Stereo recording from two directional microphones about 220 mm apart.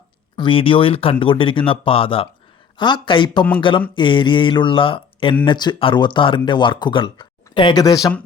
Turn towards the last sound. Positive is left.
turn(degrees=20)  # may be behind; listen again after turning